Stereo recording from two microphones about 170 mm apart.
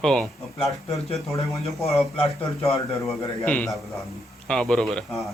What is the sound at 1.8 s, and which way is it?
Speech, 35° left (ahead or behind).